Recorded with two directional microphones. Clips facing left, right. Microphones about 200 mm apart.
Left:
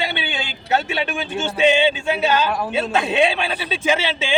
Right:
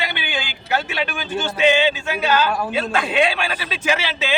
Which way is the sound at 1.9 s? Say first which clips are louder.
Left 1 dB; 25° left (ahead or behind).